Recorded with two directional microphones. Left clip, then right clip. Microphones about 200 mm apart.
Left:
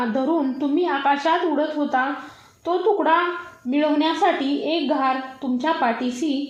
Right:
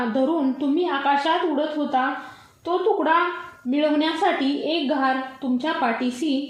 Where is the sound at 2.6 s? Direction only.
20° left (ahead or behind).